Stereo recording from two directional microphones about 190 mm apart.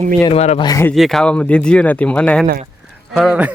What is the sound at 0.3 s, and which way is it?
Speech, 35° left (ahead or behind).